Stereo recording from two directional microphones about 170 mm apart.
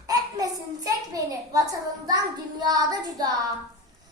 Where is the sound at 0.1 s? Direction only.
20° right (ahead or behind).